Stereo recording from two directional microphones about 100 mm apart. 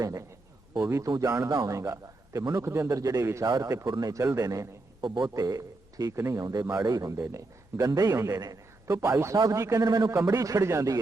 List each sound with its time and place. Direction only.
0.0 s a man's voice: 35° right (ahead or behind)
2.6 s a man's voice: 30° right (ahead or behind)
3.4 s a man's voice: 40° right (ahead or behind)
6.4 s a man's voice: 40° right (ahead or behind)
9.8 s a man's voice: 45° right (ahead or behind)